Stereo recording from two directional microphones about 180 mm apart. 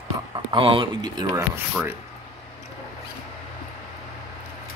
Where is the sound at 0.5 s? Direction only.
30° right (ahead or behind).